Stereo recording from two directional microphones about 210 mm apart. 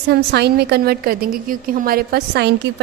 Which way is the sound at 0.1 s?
50° right (ahead or behind).